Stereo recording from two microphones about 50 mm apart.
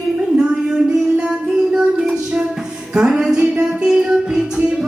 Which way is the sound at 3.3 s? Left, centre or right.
Centre.